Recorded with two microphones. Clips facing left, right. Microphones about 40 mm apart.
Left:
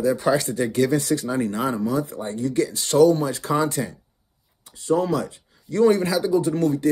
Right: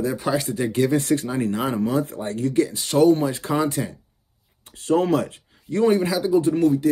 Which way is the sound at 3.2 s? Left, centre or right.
Centre.